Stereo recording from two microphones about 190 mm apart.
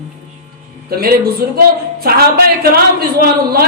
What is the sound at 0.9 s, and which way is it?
A man's voice, 50° right (ahead or behind).